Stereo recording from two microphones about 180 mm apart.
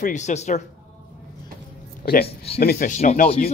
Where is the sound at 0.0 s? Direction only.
40° left (ahead or behind).